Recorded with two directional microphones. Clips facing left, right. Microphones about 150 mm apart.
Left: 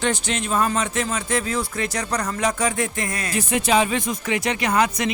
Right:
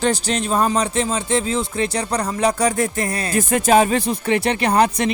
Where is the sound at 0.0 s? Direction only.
35° right (ahead or behind).